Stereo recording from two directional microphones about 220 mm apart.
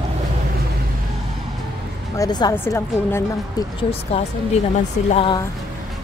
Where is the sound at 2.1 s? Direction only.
20° left (ahead or behind).